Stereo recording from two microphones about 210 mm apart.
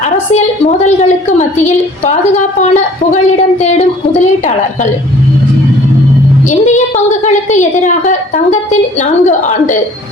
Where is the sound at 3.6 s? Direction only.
35° left (ahead or behind).